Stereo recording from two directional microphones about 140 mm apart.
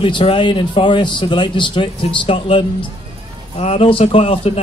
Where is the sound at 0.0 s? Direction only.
40° left (ahead or behind).